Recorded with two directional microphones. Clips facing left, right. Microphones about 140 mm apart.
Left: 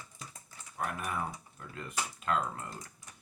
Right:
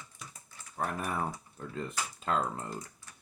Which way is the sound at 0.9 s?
35° right (ahead or behind).